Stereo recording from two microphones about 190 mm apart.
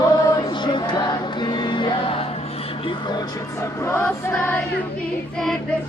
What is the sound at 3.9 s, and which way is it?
Choir, 10° left (ahead or behind).